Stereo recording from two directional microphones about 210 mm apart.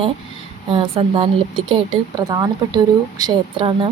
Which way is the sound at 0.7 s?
25° right (ahead or behind).